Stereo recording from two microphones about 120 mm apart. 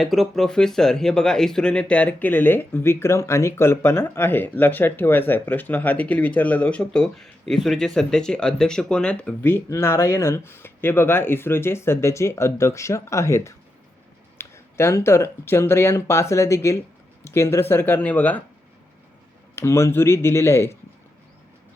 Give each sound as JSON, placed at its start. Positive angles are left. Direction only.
{"t": 0.0, "sound": "speech", "side_deg": 0}
{"t": 19.5, "sound": "speech", "side_deg": 20}